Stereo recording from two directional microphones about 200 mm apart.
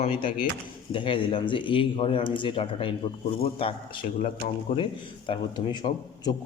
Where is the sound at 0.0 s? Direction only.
30° left (ahead or behind).